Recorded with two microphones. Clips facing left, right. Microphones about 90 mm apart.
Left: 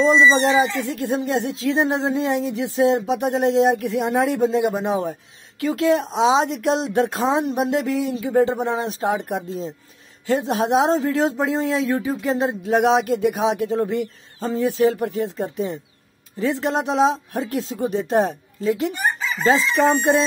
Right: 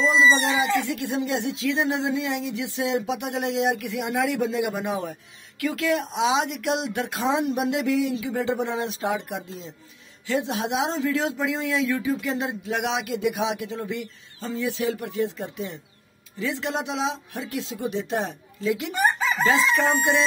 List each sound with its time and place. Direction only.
0.0 s speech: 40° left (ahead or behind)